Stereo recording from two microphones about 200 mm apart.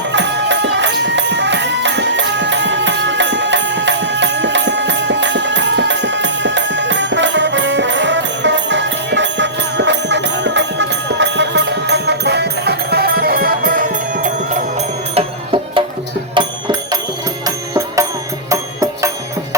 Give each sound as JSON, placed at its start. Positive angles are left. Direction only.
{"t": 0.1, "sound": "music", "side_deg": -60}
{"t": 15.1, "sound": "music", "side_deg": -25}
{"t": 18.5, "sound": "music", "side_deg": -15}